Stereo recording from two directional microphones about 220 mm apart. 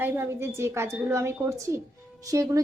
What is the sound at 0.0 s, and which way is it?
A woman's voice, 10° right (ahead or behind).